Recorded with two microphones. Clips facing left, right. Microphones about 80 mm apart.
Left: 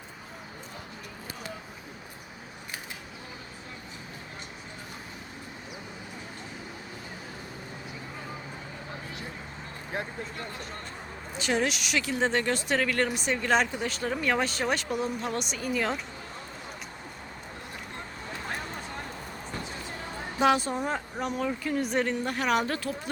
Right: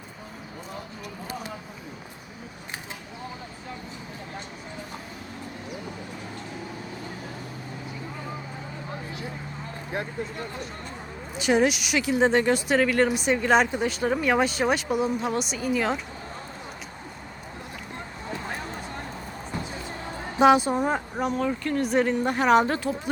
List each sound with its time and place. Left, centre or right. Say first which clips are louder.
11.3 s speech: right 6 dB; centre
20.4 s speech: right 6 dB; centre
21.2 s speech: right 3 dB; centre
22.2 s speech: right 7 dB; right